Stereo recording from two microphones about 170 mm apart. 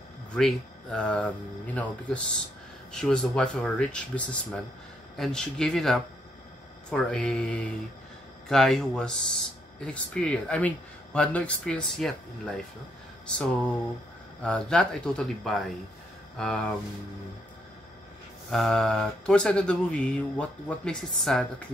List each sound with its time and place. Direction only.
0.3 s speech: 5° left (ahead or behind)
14.4 s speech: 5° left (ahead or behind)
18.5 s speech: centre (ahead or behind)